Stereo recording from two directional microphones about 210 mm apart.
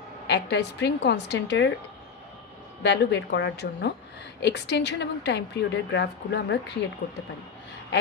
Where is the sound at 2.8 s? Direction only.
55° left (ahead or behind).